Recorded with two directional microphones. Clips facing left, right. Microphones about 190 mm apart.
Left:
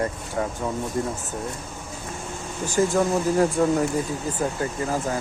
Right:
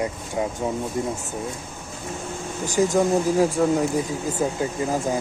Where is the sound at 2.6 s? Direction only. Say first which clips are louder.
Right 1 dB; 15° right (ahead or behind).